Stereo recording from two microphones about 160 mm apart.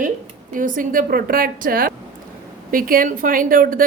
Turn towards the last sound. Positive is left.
turn(degrees=-60)  # may be behind; listen again after turning